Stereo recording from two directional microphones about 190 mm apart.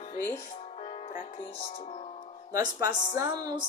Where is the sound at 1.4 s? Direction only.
30° left (ahead or behind).